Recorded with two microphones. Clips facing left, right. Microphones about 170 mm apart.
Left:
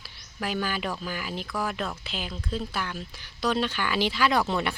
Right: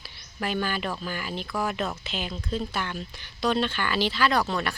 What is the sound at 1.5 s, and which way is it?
Speech, 5° right (ahead or behind).